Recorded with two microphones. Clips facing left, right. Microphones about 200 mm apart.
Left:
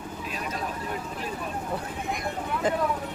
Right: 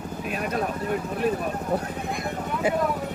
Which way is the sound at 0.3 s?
55° right (ahead or behind).